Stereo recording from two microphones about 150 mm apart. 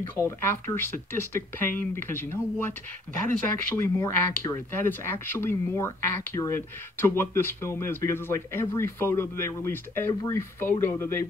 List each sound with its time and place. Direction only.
0.2 s speech: 15° left (ahead or behind)
3.7 s speech: 20° left (ahead or behind)